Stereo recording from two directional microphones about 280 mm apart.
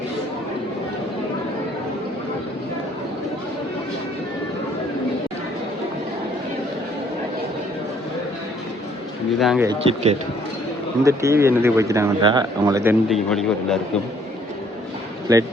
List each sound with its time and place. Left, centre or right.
9.4 s speech: centre
9.6 s speech: right
11.0 s speech: centre
15.3 s speech: centre